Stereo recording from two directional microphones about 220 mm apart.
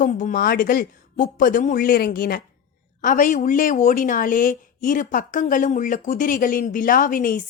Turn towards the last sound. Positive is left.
turn(degrees=40)  # may be behind; listen again after turning